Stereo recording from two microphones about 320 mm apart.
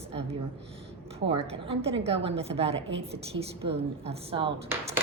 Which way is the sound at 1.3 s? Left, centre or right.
Centre.